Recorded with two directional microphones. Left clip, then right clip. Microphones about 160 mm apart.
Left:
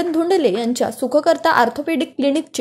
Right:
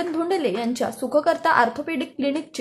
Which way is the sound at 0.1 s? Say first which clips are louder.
Left 9 dB; 35° left (ahead or behind).